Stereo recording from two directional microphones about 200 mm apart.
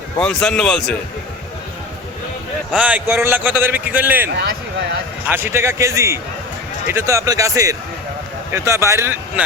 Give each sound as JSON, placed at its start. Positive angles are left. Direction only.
{"t": 0.2, "sound": "a man's voice", "side_deg": 5}
{"t": 2.7, "sound": "a man's voice", "side_deg": -10}
{"t": 5.3, "sound": "a man's voice", "side_deg": -10}